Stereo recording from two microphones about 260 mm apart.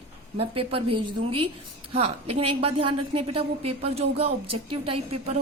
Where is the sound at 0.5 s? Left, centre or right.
Right.